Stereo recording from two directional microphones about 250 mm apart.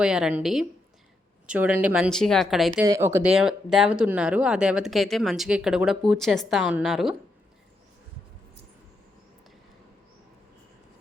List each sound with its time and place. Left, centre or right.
0.0 s speech: centre
2.8 s speech: centre